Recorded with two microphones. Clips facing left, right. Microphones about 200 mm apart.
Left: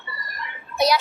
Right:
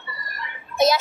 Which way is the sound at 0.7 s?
25° right (ahead or behind).